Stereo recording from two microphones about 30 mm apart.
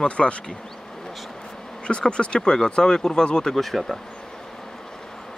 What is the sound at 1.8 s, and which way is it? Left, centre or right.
Speech, left.